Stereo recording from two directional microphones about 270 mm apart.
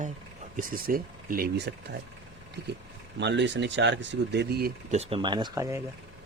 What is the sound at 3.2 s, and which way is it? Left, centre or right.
Speech, right.